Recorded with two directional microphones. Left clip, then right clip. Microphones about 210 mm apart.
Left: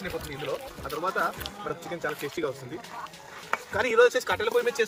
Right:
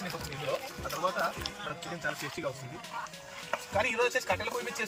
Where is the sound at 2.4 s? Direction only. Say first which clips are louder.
Left 8 dB; 45° left (ahead or behind).